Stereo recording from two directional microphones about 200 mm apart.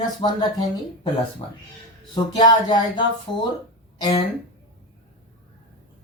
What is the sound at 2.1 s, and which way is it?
Speech, 20° left (ahead or behind).